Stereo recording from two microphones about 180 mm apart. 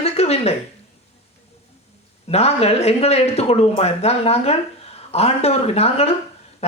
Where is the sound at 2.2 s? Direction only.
35° left (ahead or behind).